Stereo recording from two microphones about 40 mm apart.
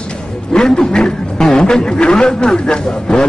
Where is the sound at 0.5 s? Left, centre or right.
Centre.